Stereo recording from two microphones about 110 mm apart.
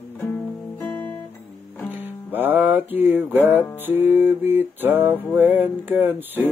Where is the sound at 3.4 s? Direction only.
20° right (ahead or behind).